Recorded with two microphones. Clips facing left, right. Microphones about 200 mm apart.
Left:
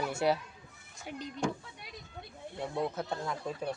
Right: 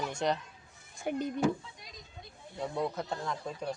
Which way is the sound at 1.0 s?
50° right (ahead or behind).